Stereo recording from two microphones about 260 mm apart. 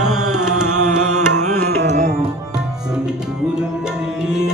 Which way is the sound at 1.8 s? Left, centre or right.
Right.